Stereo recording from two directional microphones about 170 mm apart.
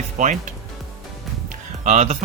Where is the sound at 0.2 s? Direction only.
45° right (ahead or behind).